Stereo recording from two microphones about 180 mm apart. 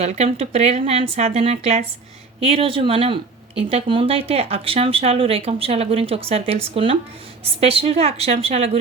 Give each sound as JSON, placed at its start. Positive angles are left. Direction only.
{"t": 0.0, "sound": "speech", "side_deg": -35}